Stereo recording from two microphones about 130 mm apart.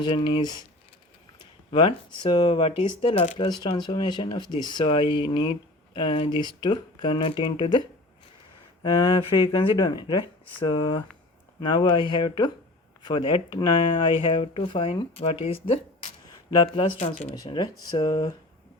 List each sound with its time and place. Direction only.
0.0 s speech: 40° left (ahead or behind)
1.7 s speech: 40° left (ahead or behind)